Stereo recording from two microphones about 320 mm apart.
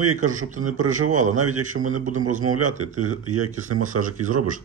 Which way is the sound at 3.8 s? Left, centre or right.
Right.